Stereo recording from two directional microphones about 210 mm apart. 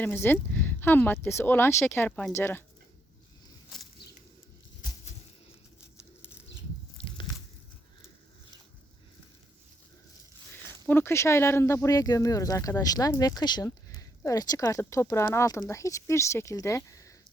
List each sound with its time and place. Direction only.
0.0 s speech: 10° left (ahead or behind)
7.0 s biting: 25° left (ahead or behind)
10.8 s speech: 10° left (ahead or behind)